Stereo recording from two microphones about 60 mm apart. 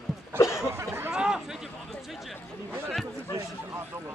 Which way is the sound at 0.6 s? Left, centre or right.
Right.